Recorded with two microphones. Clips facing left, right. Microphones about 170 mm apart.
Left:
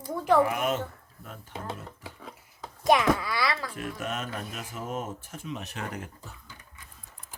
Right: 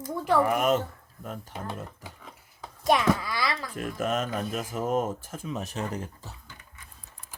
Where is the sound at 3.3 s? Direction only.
20° right (ahead or behind).